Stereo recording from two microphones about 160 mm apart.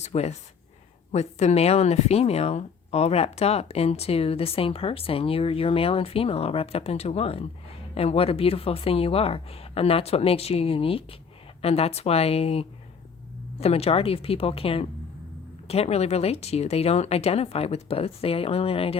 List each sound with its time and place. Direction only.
0.0 s speech: 40° left (ahead or behind)